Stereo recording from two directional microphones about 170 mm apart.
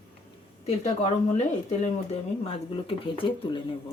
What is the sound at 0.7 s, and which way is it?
Speech, 40° left (ahead or behind).